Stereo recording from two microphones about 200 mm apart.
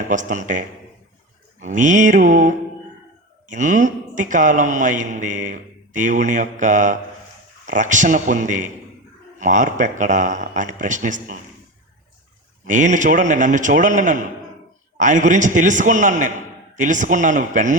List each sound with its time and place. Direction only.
0.1 s a man's voice: 40° right (ahead or behind)
12.6 s a man's voice: 40° right (ahead or behind)